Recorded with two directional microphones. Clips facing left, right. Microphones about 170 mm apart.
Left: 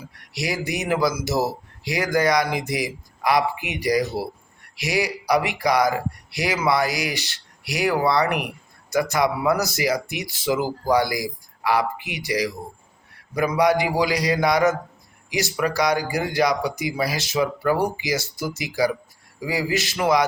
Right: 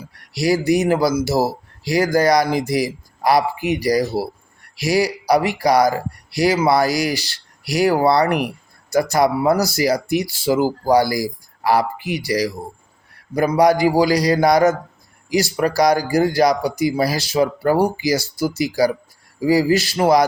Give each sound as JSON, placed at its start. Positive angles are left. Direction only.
{"t": 0.1, "sound": "speech", "side_deg": -35}